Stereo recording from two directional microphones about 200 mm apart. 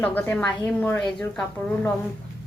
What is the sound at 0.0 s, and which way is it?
A woman's voice, 10° left (ahead or behind).